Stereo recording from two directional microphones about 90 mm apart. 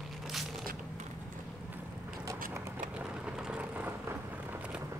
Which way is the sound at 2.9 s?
10° right (ahead or behind).